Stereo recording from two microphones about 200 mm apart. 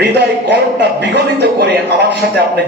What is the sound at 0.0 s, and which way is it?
A man's voice, 55° right (ahead or behind).